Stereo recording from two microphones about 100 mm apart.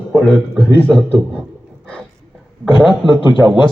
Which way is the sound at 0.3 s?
10° left (ahead or behind).